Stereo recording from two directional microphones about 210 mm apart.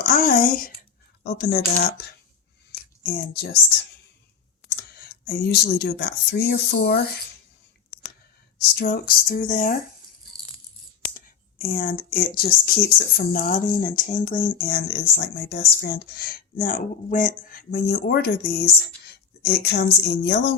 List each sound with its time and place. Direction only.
0.0 s a sound: 45° left (ahead or behind)
1.2 s speech: 45° left (ahead or behind)
4.8 s speech: 50° left (ahead or behind)
8.7 s speech: 45° left (ahead or behind)
11.1 s a woman's voice: 45° left (ahead or behind)